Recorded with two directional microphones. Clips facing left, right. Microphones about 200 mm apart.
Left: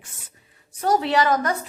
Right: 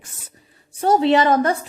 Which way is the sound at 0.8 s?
25° right (ahead or behind).